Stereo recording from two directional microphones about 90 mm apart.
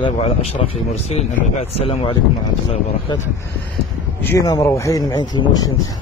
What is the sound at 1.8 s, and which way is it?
Speech, 90° left.